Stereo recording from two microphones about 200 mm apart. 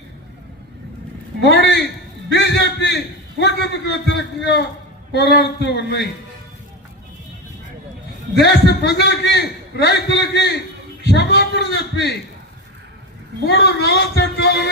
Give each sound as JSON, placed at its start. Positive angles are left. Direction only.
{"t": 1.4, "sound": "a man's voice", "side_deg": 60}
{"t": 2.3, "sound": "a sound", "side_deg": 60}
{"t": 3.4, "sound": "a man's voice", "side_deg": 55}
{"t": 8.4, "sound": "a man's voice", "side_deg": 55}
{"t": 13.5, "sound": "a man's voice", "side_deg": 55}